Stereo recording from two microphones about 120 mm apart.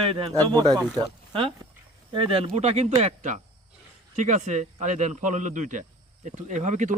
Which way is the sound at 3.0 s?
90° right.